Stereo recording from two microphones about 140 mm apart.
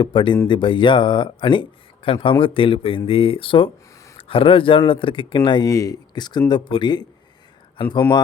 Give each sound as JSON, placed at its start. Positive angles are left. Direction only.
{"t": 0.0, "sound": "speech", "side_deg": 35}